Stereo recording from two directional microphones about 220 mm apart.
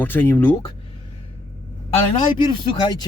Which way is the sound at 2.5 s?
20° left (ahead or behind).